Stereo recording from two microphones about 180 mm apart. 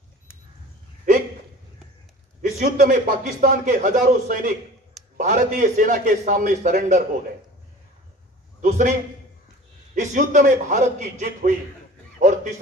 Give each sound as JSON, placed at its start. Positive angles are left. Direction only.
{"t": 2.6, "sound": "a man's voice", "side_deg": -45}
{"t": 8.5, "sound": "a man's voice", "side_deg": -40}
{"t": 9.9, "sound": "a man's voice", "side_deg": -45}
{"t": 12.2, "sound": "a sound", "side_deg": -45}